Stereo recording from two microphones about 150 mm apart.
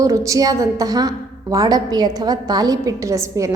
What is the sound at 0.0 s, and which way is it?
A woman's voice, 20° right (ahead or behind).